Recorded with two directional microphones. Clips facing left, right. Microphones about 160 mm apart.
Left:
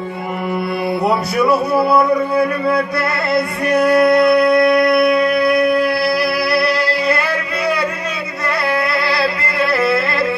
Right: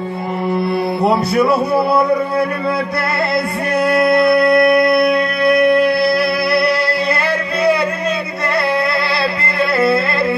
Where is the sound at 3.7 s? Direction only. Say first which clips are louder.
Left 2 dB; 25° right (ahead or behind).